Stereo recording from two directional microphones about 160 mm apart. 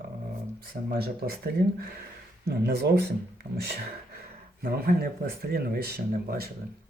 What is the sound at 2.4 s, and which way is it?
Speech, 90° right.